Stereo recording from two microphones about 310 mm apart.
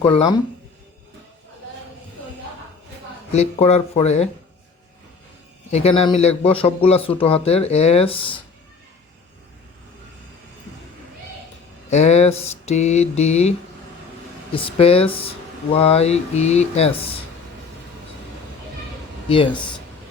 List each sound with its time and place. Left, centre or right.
0.0 s speech: centre
3.3 s speech: left
5.7 s speech: centre
11.9 s speech: left
14.5 s speech: centre
19.3 s speech: centre